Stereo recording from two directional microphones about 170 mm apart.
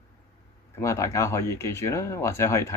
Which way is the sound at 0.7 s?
15° left (ahead or behind).